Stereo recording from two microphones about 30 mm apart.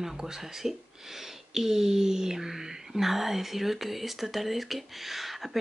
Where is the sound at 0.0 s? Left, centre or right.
Centre.